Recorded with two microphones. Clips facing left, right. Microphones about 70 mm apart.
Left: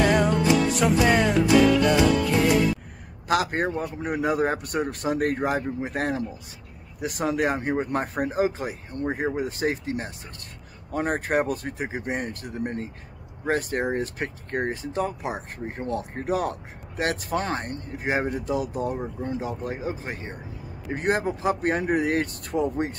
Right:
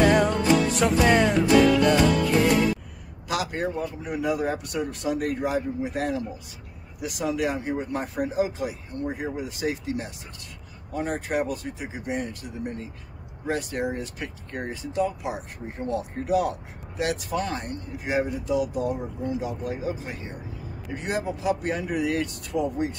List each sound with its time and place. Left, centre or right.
0.0 s music: centre
3.3 s speech: left